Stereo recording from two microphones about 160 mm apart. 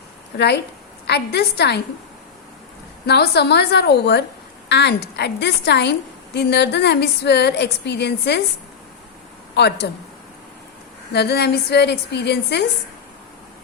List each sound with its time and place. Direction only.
0.3 s a woman's voice: 90° left
3.1 s a woman's voice: 90° left
9.6 s a woman's voice: 90° left
11.1 s a woman's voice: 90° left